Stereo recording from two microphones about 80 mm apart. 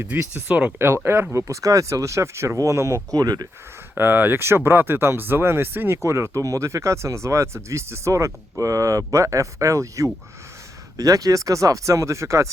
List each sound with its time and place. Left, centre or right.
0.0 s speech: centre
1.0 s speech: right
3.9 s speech: right